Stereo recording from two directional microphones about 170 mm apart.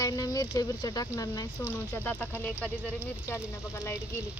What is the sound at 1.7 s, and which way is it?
Speech, 10° left (ahead or behind).